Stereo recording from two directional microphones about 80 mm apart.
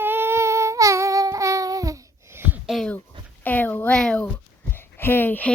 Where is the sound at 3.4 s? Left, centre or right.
Left.